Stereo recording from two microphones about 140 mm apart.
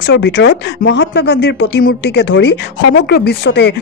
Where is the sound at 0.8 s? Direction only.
90° left.